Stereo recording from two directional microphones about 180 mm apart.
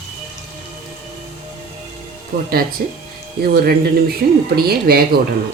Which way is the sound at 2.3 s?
55° right (ahead or behind).